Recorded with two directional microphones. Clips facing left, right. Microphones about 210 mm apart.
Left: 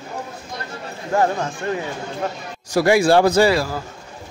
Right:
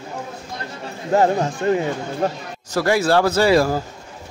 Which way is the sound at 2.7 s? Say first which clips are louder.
Left 3 dB; 15° left (ahead or behind).